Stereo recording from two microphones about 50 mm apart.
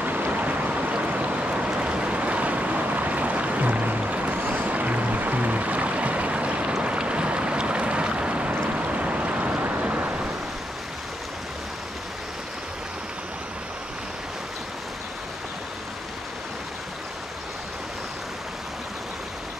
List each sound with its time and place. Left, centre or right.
0.0 s boat: right
8.6 s a sound: right
9.6 s waves: right